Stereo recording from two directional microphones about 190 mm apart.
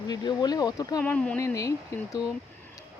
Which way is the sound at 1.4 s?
15° left (ahead or behind).